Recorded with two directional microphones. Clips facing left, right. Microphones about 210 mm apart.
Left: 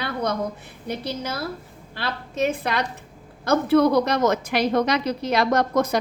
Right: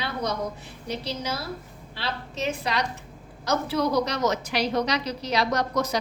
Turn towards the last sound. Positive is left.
turn(degrees=55)  # may be behind; listen again after turning